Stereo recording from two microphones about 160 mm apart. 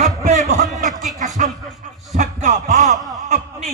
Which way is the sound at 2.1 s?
45° right (ahead or behind).